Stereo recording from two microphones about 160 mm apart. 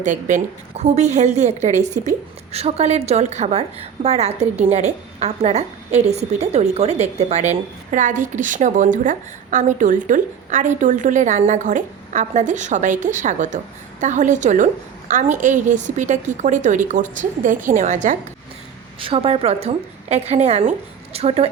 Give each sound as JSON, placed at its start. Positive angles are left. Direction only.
{"t": 0.0, "sound": "a woman's voice", "side_deg": -50}
{"t": 18.9, "sound": "a woman's voice", "side_deg": -35}